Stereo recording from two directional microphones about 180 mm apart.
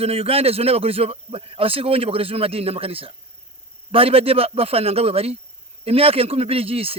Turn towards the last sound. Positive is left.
turn(degrees=-30)  # may be behind; listen again after turning